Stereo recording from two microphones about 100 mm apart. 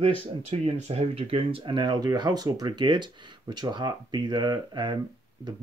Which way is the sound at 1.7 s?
45° right (ahead or behind).